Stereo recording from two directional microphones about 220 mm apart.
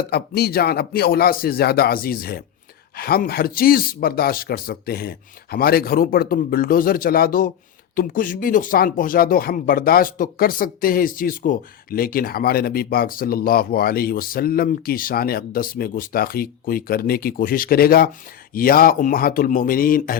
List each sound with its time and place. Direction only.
0.1 s a man's voice: 45° left (ahead or behind)